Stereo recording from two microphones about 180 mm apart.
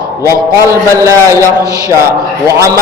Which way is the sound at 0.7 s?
15° right (ahead or behind).